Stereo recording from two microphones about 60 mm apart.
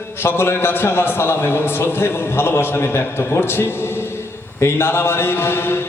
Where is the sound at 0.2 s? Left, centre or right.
Left.